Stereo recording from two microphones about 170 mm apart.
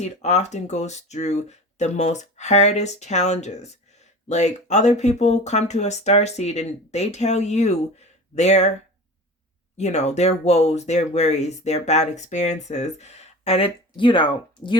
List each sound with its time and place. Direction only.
0.0 s speech: 40° left (ahead or behind)
9.7 s speech: 40° left (ahead or behind)